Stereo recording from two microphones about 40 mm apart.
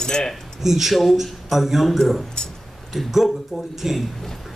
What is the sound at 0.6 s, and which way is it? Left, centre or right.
Speech, centre.